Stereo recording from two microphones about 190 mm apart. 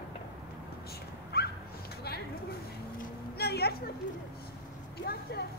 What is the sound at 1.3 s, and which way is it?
Dog, 55° left (ahead or behind).